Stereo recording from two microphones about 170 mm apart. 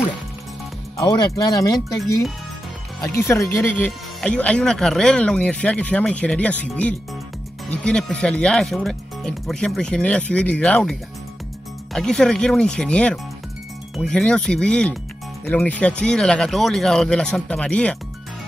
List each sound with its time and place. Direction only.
1.0 s speech: 25° left (ahead or behind)
3.2 s speech: 15° left (ahead or behind)